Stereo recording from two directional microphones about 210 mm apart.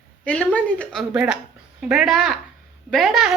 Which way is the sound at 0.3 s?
5° left (ahead or behind).